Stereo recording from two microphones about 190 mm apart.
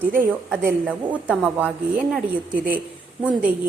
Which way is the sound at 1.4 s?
10° right (ahead or behind).